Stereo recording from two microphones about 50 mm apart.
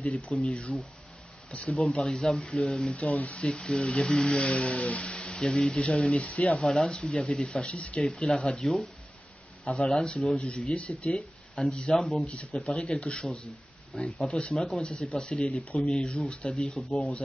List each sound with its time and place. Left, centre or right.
0.0 s speech: left
2.0 s speech: centre; by 3.4 s left
3.4 s speech: centre
6.6 s speech: centre; by 8.0 s left
8.0 s speech: centre
9.7 s speech: left
10.4 s speech: left
11.9 s speech: centre
12.3 s speech: left